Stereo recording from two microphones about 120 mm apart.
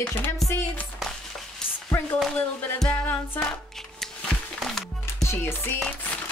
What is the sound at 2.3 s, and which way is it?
Music, 10° left (ahead or behind).